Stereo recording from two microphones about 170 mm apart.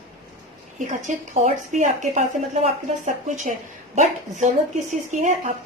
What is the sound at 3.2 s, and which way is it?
A woman's voice, 45° right (ahead or behind).